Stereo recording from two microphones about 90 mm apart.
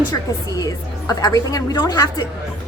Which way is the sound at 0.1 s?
45° left (ahead or behind).